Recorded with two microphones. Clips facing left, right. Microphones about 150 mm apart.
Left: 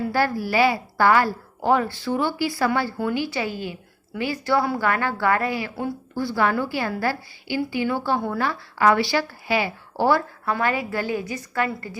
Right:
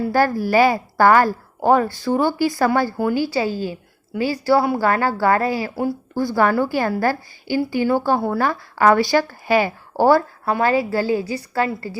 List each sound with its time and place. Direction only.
0.1 s a woman's voice: 45° right (ahead or behind)